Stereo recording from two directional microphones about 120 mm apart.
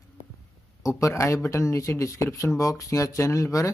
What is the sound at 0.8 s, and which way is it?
Speech, 25° left (ahead or behind).